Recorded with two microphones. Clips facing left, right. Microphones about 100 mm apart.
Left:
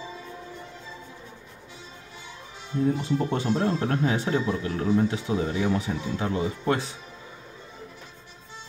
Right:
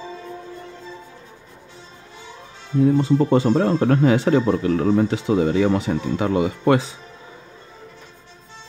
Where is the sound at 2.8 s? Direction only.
90° right.